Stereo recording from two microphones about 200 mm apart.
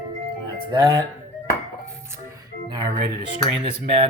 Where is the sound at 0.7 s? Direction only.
20° right (ahead or behind).